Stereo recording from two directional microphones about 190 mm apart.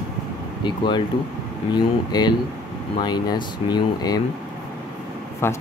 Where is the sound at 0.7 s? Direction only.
25° left (ahead or behind).